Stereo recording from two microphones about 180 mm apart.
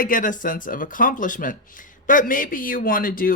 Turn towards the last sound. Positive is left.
turn(degrees=50)  # may be behind; listen again after turning